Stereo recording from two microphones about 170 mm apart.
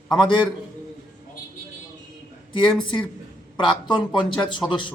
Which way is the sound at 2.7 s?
5° left (ahead or behind).